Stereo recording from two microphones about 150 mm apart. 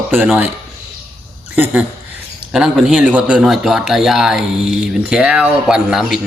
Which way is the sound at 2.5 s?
Centre (ahead or behind).